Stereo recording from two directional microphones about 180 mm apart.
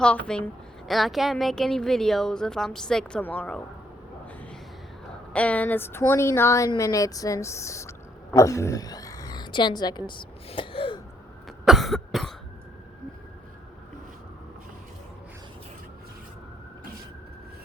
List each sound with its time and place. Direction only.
0.0 s speech: 5° left (ahead or behind)
5.3 s speech: 5° left (ahead or behind); by 11.0 s 30° left (ahead or behind)
11.4 s cough: centre (ahead or behind)